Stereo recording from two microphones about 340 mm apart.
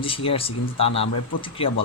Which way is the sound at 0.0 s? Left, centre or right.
Centre.